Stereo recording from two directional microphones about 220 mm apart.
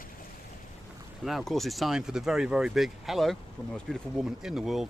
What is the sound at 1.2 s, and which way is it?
Speech, centre (ahead or behind).